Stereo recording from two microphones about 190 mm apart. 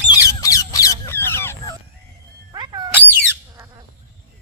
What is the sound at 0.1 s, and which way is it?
Bird, 15° left (ahead or behind).